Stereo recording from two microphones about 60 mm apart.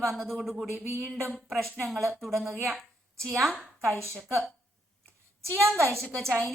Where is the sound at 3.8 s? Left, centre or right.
Right.